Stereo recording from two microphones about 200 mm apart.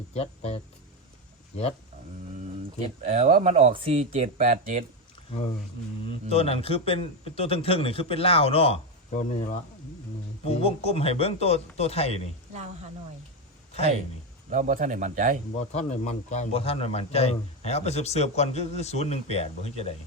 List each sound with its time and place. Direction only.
0.1 s speech: 30° left (ahead or behind)
3.0 s speech: 40° right (ahead or behind)
6.1 s a man's voice: 30° left (ahead or behind)
14.5 s speech: 40° right (ahead or behind)
15.5 s a man's voice: 35° left (ahead or behind)